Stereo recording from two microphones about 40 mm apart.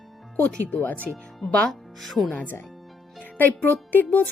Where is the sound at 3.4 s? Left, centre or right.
Left.